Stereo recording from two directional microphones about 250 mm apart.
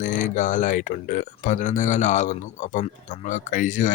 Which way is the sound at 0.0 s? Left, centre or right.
Left.